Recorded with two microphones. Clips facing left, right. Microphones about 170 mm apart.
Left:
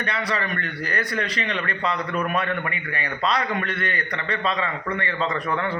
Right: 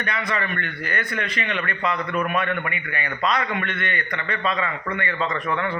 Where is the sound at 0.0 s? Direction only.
30° left (ahead or behind).